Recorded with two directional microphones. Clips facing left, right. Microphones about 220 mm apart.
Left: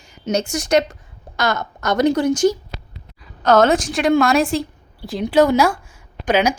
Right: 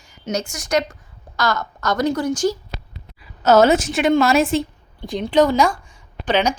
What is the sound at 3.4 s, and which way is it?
A woman's voice, 5° right (ahead or behind).